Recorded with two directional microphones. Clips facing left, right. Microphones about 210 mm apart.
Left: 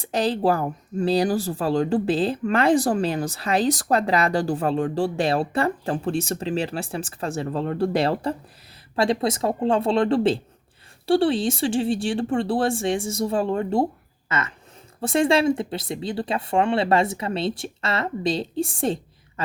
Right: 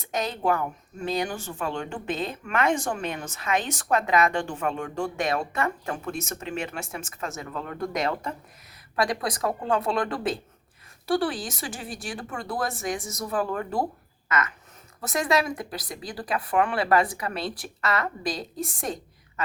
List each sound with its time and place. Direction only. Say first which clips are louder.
0.0 s a woman's voice: left 6 dB; 30° left (ahead or behind)